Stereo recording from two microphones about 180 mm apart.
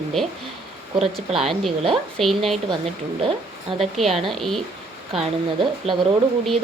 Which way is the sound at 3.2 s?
30° right (ahead or behind).